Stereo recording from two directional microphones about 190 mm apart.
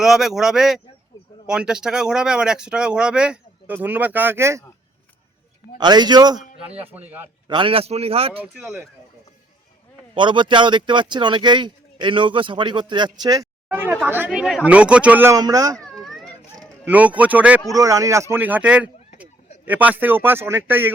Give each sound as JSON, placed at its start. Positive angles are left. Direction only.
{"t": 0.0, "sound": "speech", "side_deg": 0}
{"t": 5.7, "sound": "speech", "side_deg": -20}
{"t": 7.4, "sound": "speech", "side_deg": -25}
{"t": 8.5, "sound": "speech", "side_deg": -5}
{"t": 10.2, "sound": "speech", "side_deg": -25}
{"t": 16.0, "sound": "children playing", "side_deg": 0}
{"t": 16.8, "sound": "speech", "side_deg": -10}